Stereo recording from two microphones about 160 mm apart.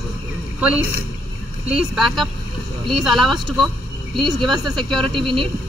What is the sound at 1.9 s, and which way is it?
Speech, centre (ahead or behind).